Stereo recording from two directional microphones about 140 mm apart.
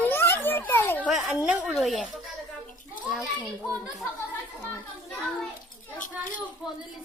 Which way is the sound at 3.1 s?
Centre (ahead or behind).